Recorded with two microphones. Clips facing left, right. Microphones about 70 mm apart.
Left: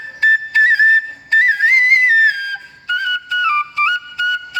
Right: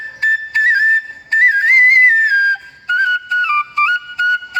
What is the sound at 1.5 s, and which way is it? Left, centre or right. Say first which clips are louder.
Flute: right 5 dB; right.